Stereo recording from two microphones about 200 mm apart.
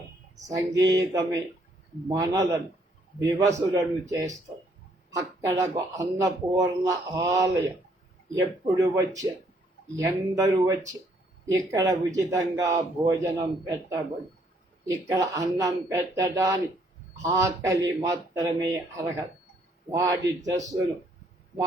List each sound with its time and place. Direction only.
0.4 s a man's voice: 15° right (ahead or behind)